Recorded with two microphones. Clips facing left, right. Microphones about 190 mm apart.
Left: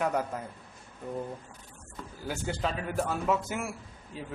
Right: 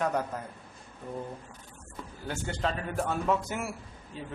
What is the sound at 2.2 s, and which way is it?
A man's voice, 5° left (ahead or behind).